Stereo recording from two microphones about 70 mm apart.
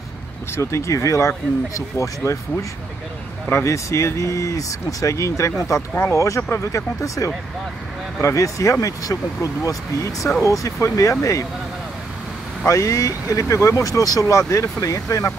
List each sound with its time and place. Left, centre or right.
0.6 s speech: left
3.6 s speech: left
12.6 s speech: left